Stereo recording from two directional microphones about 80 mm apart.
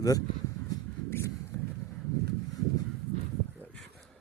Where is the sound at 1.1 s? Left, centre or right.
Left.